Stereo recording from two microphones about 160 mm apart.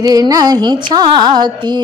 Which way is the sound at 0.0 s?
25° right (ahead or behind).